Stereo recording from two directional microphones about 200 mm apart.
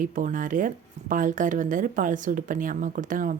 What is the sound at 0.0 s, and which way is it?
Speech, 40° right (ahead or behind).